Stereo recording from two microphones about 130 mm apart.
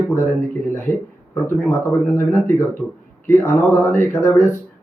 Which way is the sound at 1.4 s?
20° left (ahead or behind).